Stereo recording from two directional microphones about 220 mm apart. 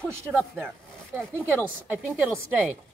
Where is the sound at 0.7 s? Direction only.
5° left (ahead or behind).